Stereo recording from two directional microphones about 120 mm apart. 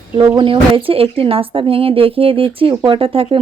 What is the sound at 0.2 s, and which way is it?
Speech, 45° right (ahead or behind).